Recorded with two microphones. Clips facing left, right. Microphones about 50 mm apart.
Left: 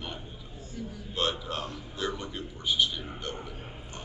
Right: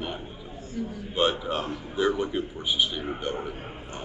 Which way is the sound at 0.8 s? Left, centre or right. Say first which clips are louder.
Right 7 dB; centre.